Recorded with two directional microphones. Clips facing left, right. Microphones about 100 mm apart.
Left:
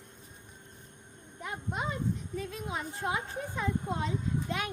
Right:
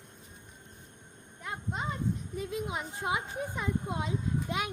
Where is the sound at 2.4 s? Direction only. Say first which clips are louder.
Right 2 dB; 15° right (ahead or behind).